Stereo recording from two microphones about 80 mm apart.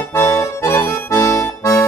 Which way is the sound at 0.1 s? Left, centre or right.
Left.